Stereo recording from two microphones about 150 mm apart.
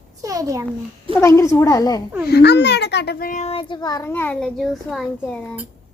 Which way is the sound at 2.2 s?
90° left.